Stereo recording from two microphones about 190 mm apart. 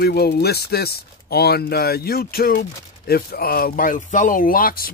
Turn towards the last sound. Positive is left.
turn(degrees=50)  # may be behind; listen again after turning